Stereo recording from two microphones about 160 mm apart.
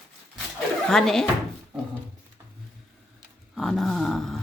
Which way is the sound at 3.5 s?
Centre (ahead or behind).